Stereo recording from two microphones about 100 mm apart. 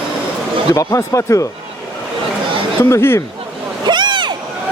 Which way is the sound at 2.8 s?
25° left (ahead or behind).